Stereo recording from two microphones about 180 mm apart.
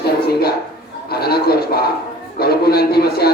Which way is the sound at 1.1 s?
60° left (ahead or behind).